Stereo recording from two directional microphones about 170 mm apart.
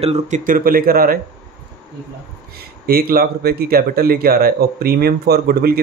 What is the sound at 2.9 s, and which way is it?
Speech, 60° right (ahead or behind).